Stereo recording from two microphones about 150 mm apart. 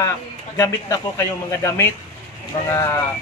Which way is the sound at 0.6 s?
20° left (ahead or behind).